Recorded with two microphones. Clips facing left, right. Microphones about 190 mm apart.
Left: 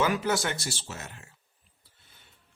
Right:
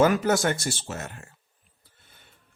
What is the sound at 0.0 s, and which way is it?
Speech, 45° right (ahead or behind).